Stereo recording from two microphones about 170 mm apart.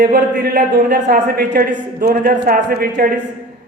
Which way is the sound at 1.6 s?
60° right (ahead or behind).